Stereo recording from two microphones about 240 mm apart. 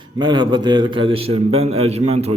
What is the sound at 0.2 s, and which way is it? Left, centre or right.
A man's voice, centre.